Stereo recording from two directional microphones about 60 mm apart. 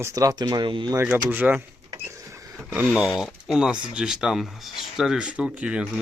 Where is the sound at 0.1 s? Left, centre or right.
Right.